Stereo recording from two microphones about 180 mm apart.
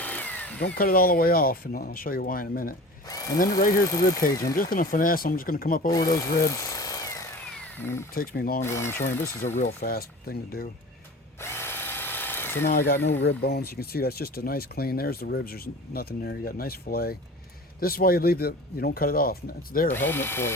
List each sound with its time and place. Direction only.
0.0 s power tool: 10° left (ahead or behind)
0.6 s speech: 60° left (ahead or behind)
4.2 s speech: 50° left (ahead or behind)
6.1 s power tool: 15° left (ahead or behind)
7.5 s a sound: 10° left (ahead or behind)
8.1 s speech: 55° left (ahead or behind)
8.6 s speech: 15° left (ahead or behind)
9.6 s speech: 55° left (ahead or behind)
11.3 s drill: 15° left (ahead or behind)
12.9 s speech: 85° left
13.2 s speech: 65° left (ahead or behind)
19.9 s speech: 10° left (ahead or behind)